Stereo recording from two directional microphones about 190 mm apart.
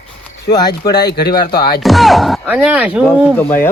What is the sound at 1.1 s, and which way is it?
Speech, 60° left (ahead or behind).